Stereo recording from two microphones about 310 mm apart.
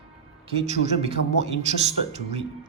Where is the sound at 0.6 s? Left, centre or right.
Right.